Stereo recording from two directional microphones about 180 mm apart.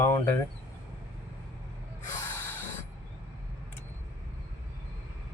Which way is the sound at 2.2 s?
15° left (ahead or behind).